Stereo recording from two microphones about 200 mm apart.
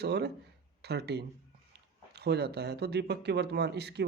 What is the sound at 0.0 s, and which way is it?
Speech, 55° right (ahead or behind).